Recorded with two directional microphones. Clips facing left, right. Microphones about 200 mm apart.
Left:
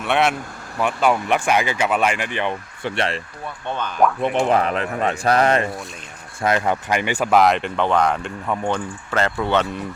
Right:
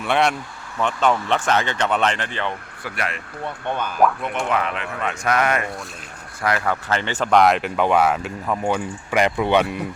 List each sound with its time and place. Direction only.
0.0 s speech: centre (ahead or behind)
2.9 s speech: 30° left (ahead or behind)
3.7 s speech: 10° right (ahead or behind)
4.4 s a man's voice: 35° left (ahead or behind)
6.4 s speech: 20° left (ahead or behind); by 9.7 s 15° right (ahead or behind)